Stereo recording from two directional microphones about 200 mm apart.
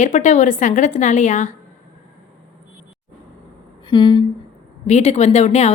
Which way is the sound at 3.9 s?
25° left (ahead or behind).